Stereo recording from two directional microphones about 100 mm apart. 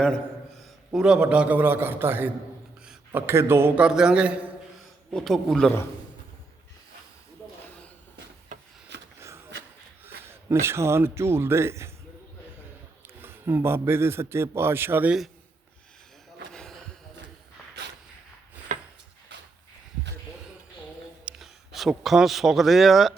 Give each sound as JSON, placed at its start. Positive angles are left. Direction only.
{"t": 0.9, "sound": "a man's voice", "side_deg": -10}
{"t": 3.8, "sound": "a man's voice", "side_deg": -10}
{"t": 5.1, "sound": "a man's voice", "side_deg": 0}
{"t": 10.2, "sound": "a man's voice", "side_deg": -25}
{"t": 13.1, "sound": "a man's voice", "side_deg": -25}
{"t": 16.5, "sound": "a sound", "side_deg": 5}
{"t": 21.2, "sound": "a man's voice", "side_deg": -5}